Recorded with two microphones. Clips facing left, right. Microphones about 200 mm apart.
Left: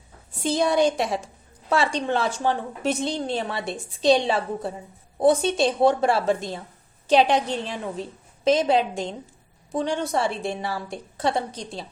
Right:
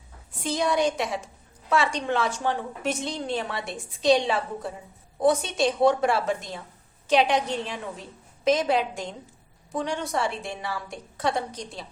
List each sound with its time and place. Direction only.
0.4 s a woman's voice: 30° left (ahead or behind)